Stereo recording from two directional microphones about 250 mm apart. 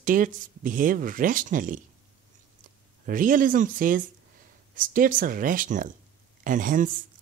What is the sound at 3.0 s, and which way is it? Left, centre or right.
Speech, right.